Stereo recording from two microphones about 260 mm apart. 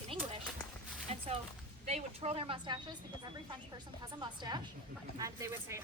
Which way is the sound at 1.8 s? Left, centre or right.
Right.